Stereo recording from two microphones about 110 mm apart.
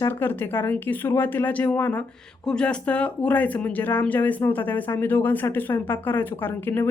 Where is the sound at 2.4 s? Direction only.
5° left (ahead or behind).